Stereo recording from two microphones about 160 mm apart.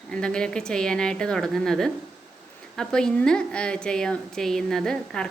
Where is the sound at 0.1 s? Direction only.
5° left (ahead or behind).